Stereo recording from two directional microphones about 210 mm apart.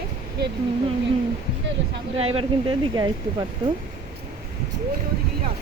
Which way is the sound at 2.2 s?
30° right (ahead or behind).